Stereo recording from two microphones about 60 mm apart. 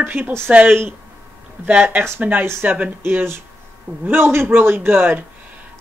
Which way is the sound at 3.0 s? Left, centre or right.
Right.